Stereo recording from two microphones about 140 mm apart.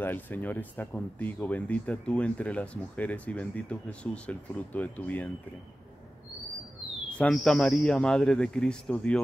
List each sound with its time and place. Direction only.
0.0 s speech: 15° left (ahead or behind)
7.2 s a man's voice: 5° left (ahead or behind)